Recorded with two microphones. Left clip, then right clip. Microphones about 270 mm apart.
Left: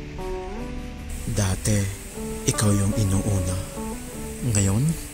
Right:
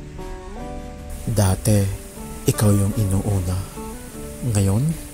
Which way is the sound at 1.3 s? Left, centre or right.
Centre.